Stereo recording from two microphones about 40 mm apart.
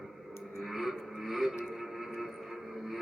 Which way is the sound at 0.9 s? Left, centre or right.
Centre.